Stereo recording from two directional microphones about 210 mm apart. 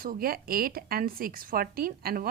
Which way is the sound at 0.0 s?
45° right (ahead or behind).